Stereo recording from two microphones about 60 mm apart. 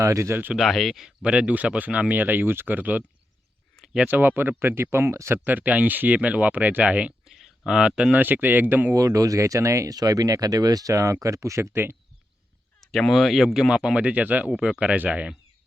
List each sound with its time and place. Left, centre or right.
0.1 s speech: right
0.5 s speech: centre
1.2 s speech: centre
4.1 s speech: right
5.3 s speech: right
7.3 s a sound: centre
8.1 s speech: right
9.0 s speech: right
12.9 s speech: centre; by 15.4 s right